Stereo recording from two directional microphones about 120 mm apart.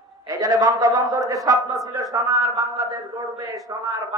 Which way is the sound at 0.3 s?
30° right (ahead or behind).